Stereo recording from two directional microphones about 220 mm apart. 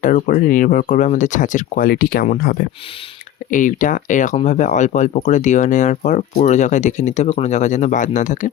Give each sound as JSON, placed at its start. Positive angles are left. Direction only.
{"t": 0.0, "sound": "speech", "side_deg": 35}